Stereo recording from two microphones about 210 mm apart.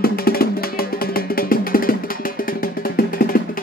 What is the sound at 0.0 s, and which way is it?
Music, 45° left (ahead or behind).